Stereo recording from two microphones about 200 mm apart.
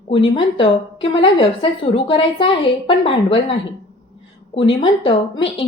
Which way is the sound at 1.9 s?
25° left (ahead or behind).